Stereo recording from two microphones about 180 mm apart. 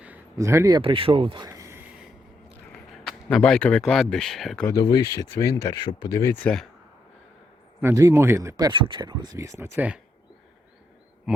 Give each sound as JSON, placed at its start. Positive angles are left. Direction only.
{"t": 0.3, "sound": "speech", "side_deg": -15}
{"t": 0.8, "sound": "speech", "side_deg": -30}
{"t": 1.5, "sound": "a sound", "side_deg": -15}
{"t": 2.9, "sound": "speech", "side_deg": 5}
{"t": 4.6, "sound": "speech", "side_deg": 20}
{"t": 6.2, "sound": "speech", "side_deg": 10}
{"t": 7.8, "sound": "speech", "side_deg": -15}